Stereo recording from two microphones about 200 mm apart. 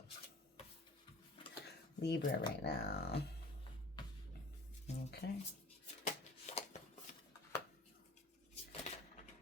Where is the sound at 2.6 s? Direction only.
55° left (ahead or behind).